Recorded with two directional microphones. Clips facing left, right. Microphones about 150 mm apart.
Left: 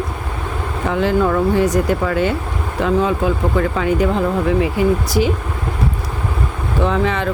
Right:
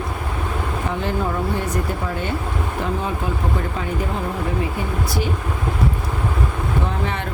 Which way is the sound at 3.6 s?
90° left.